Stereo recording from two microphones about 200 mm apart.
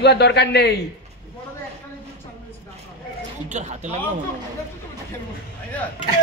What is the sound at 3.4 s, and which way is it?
Speech, 35° right (ahead or behind).